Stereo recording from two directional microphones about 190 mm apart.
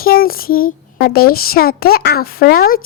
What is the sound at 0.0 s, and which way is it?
A child's voice, 50° left (ahead or behind).